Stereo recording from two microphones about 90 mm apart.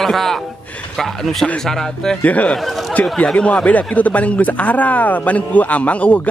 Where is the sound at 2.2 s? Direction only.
15° left (ahead or behind).